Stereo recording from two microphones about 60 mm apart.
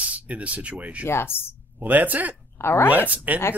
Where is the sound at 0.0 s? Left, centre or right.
Right.